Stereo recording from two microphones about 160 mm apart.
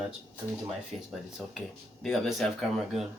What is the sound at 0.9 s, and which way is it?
Speech, centre (ahead or behind).